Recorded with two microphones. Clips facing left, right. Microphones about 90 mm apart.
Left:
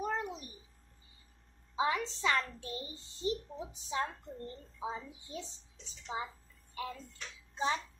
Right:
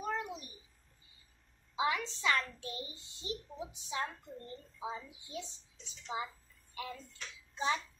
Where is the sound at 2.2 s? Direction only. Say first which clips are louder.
Even; 30° left (ahead or behind).